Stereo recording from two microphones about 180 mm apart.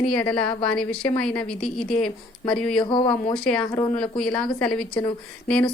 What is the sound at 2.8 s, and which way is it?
Speech, 25° left (ahead or behind).